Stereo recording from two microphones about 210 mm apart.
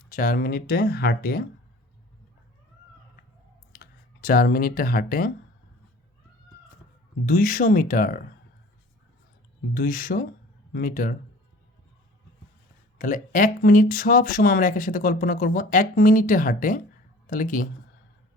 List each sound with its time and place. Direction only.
0.1 s speech: 40° left (ahead or behind)
3.8 s speech: 45° left (ahead or behind)
7.3 s speech: 40° left (ahead or behind)
9.7 s speech: 40° left (ahead or behind)
13.0 s speech: 40° left (ahead or behind)